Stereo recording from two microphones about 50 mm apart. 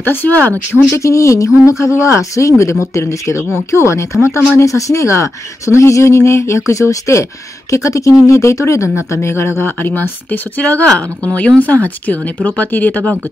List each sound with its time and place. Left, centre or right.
0.0 s a woman's voice: left
0.9 s speech: left
3.7 s speech: left
4.6 s speech: left
8.9 s speech: left
9.6 s speech: left
10.3 s a woman's voice: left